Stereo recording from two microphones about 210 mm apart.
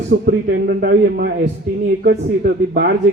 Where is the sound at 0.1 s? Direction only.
50° right (ahead or behind).